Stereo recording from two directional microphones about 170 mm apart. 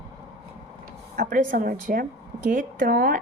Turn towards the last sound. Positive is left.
turn(degrees=-65)  # may be behind; listen again after turning